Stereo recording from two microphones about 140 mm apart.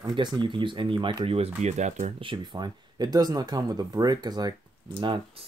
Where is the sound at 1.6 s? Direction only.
55° right (ahead or behind).